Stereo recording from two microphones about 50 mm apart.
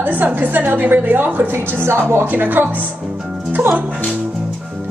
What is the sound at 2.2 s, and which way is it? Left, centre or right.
Speech, right.